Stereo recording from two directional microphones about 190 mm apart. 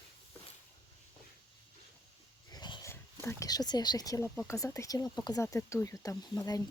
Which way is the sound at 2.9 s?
15° left (ahead or behind).